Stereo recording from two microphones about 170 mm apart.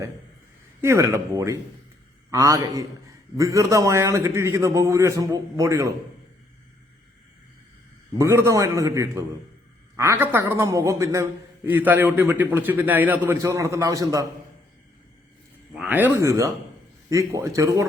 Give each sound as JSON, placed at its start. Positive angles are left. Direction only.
{"t": 0.8, "sound": "a man's voice", "side_deg": -15}
{"t": 8.2, "sound": "a man's voice", "side_deg": -15}
{"t": 15.7, "sound": "a man's voice", "side_deg": -5}